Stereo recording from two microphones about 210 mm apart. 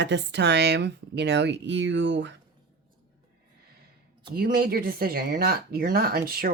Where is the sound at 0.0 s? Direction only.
55° right (ahead or behind).